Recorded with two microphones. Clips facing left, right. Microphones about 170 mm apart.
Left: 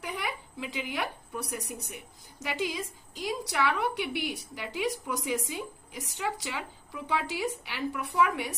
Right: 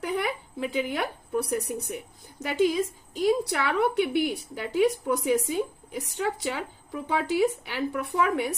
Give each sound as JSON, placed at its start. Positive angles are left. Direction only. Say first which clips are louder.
{"t": 0.0, "sound": "a woman's voice", "louder": "right 7 dB", "side_deg": -50}